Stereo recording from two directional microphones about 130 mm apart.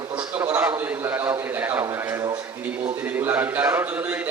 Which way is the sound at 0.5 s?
15° right (ahead or behind).